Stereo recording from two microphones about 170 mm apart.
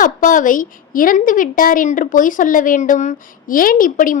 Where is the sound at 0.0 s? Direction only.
50° left (ahead or behind).